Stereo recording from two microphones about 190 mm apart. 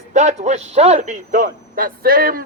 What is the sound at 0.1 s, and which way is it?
A man's voice, 40° right (ahead or behind).